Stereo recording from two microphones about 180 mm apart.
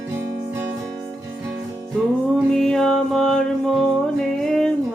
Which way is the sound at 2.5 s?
Centre (ahead or behind).